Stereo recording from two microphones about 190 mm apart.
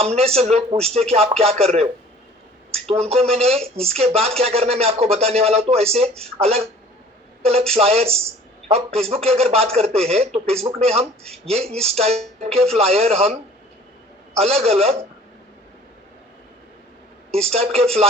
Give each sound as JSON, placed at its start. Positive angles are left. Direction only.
{"t": 0.0, "sound": "speech", "side_deg": -30}
{"t": 14.3, "sound": "speech", "side_deg": -35}
{"t": 17.3, "sound": "speech", "side_deg": -30}